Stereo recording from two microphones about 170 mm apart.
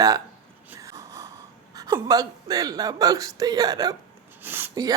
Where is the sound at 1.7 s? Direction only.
20° right (ahead or behind).